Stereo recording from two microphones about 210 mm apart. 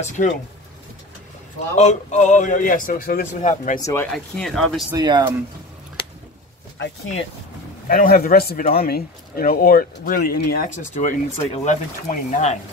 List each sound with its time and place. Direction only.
0.2 s a man's voice: 40° left (ahead or behind)
1.8 s a man's voice: 35° left (ahead or behind)
3.8 s speech: 10° left (ahead or behind)
4.9 s speech: 20° right (ahead or behind)
7.9 s speech: 45° left (ahead or behind)